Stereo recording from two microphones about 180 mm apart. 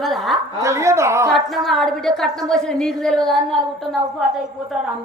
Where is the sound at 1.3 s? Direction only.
Centre (ahead or behind).